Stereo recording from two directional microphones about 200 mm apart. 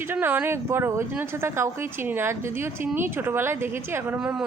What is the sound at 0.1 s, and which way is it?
Speech, 10° right (ahead or behind).